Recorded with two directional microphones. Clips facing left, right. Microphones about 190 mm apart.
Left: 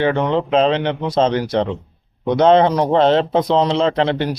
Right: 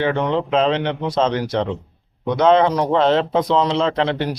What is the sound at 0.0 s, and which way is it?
Speech, 30° left (ahead or behind).